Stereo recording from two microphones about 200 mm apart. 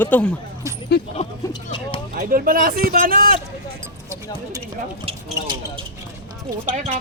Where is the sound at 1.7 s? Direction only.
25° left (ahead or behind).